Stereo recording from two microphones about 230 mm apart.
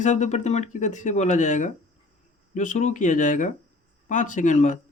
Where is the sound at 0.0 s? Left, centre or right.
Left.